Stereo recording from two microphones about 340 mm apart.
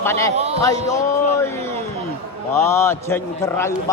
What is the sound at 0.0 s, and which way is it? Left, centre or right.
Speech, centre.